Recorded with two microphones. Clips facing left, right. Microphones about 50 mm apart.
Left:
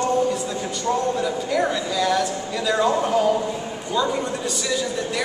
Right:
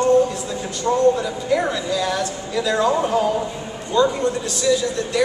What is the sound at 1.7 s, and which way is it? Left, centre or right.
A man's voice, centre.